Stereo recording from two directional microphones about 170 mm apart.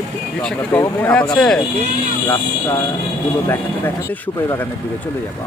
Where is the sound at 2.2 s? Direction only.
15° left (ahead or behind).